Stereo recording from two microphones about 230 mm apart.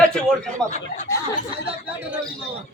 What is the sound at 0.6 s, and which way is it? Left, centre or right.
Speech, left.